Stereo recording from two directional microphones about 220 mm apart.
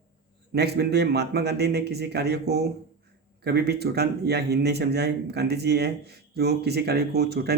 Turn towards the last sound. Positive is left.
turn(degrees=-45)  # may be behind; listen again after turning